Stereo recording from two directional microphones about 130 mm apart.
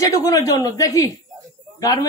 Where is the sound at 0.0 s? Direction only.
25° left (ahead or behind).